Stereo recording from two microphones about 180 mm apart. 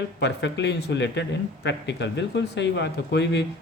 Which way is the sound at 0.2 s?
75° left (ahead or behind).